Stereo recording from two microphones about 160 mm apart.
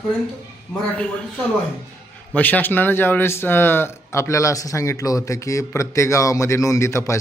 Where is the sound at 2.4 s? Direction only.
10° left (ahead or behind).